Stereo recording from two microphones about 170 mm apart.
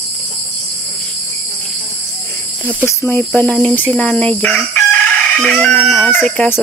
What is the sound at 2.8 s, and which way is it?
Speech, 10° left (ahead or behind).